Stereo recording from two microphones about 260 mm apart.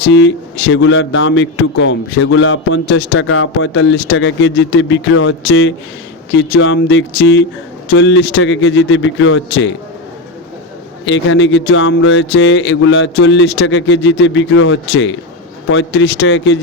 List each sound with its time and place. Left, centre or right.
0.1 s a man's voice: left
11.0 s a man's voice: left